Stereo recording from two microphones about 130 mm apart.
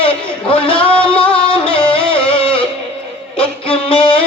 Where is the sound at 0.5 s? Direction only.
45° left (ahead or behind).